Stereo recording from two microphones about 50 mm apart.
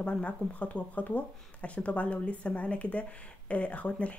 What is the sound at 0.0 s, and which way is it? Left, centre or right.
Speech, left.